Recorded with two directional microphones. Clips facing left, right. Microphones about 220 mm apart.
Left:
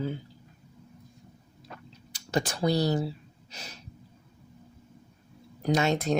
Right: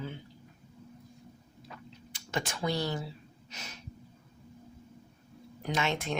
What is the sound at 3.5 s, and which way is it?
Speech, 35° left (ahead or behind).